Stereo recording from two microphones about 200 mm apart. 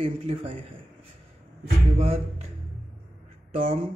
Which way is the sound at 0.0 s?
30° right (ahead or behind).